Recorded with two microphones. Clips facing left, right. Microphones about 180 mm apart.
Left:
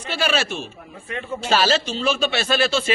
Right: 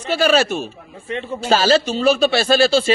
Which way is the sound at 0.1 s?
40° right (ahead or behind).